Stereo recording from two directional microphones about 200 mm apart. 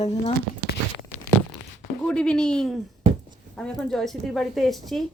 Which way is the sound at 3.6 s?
Centre (ahead or behind).